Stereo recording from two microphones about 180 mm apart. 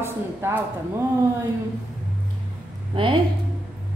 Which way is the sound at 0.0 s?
15° right (ahead or behind).